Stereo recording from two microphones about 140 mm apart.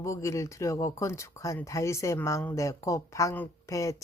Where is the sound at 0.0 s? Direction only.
20° left (ahead or behind).